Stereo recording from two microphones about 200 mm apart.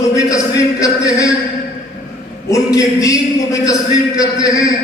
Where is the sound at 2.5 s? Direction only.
15° left (ahead or behind).